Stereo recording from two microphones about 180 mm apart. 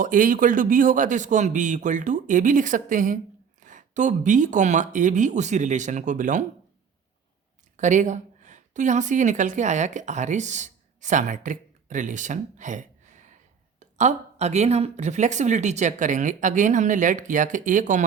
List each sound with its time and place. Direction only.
0.0 s speech: 45° right (ahead or behind)
7.8 s a woman's voice: 45° right (ahead or behind)